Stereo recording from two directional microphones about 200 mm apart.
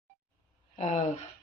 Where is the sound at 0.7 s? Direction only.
35° left (ahead or behind).